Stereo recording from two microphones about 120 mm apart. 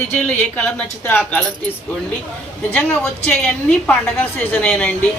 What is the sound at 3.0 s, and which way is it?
A woman's voice, 10° left (ahead or behind).